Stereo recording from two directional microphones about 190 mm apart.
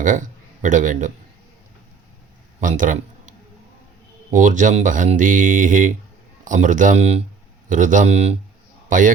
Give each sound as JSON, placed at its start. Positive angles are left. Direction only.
{"t": 0.0, "sound": "a man's voice", "side_deg": -40}
{"t": 2.6, "sound": "a sound", "side_deg": -45}
{"t": 4.3, "sound": "a man's voice", "side_deg": -40}